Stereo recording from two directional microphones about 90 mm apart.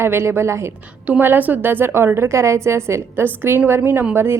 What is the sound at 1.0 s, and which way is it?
A woman's voice, 20° right (ahead or behind).